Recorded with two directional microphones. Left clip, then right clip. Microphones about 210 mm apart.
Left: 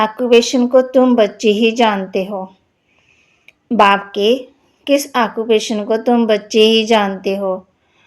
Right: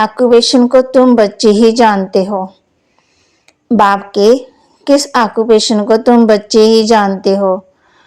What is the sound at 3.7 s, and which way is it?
Speech, 30° right (ahead or behind).